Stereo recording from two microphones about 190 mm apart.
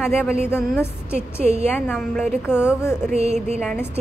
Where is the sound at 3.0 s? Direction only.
35° right (ahead or behind).